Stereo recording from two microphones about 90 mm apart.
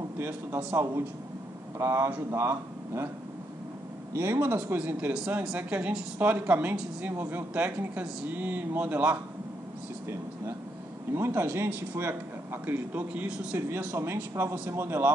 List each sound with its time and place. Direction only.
1.8 s speech: 30° right (ahead or behind)
4.1 s speech: 30° right (ahead or behind)
5.1 s speech: 10° right (ahead or behind)
11.1 s speech: 30° right (ahead or behind)